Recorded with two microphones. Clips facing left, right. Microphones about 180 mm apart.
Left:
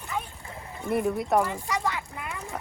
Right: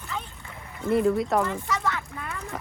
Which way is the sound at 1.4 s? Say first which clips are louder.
Even; 15° left (ahead or behind).